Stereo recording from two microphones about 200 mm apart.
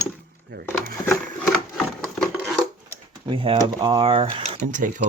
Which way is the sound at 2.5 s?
20° right (ahead or behind).